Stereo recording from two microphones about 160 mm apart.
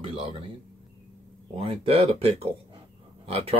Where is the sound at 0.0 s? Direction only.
35° right (ahead or behind).